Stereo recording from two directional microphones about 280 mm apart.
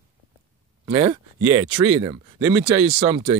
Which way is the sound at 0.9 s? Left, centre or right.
Centre.